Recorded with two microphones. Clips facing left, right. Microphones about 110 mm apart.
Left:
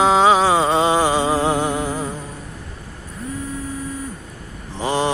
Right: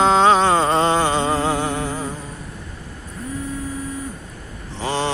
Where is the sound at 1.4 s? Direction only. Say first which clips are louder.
Left 2 dB; 20° left (ahead or behind).